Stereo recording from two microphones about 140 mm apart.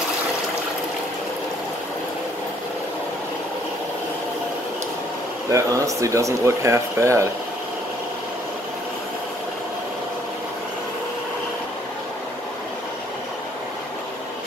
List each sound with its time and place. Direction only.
5.5 s speech: 25° right (ahead or behind)